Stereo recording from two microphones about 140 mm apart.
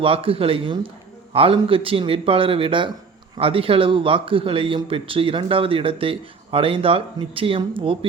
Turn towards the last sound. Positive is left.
turn(degrees=-40)  # may be behind; listen again after turning